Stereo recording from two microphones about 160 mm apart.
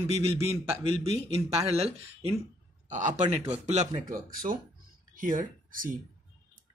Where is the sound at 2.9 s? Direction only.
45° right (ahead or behind).